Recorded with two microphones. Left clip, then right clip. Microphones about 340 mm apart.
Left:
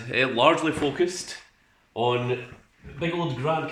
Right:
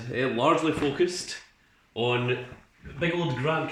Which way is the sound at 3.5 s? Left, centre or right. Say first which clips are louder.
Left 2 dB; centre.